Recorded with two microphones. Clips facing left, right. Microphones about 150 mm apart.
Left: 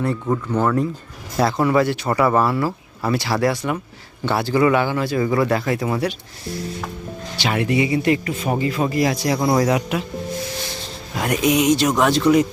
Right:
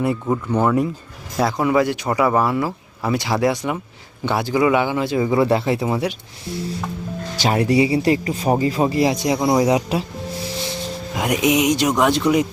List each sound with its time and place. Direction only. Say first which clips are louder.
0.0 s speech: right 1 dB; 10° right (ahead or behind)
7.3 s speech: right 3 dB; 40° right (ahead or behind); by 9.8 s 15° right (ahead or behind)
11.2 s speech: even; 15° right (ahead or behind)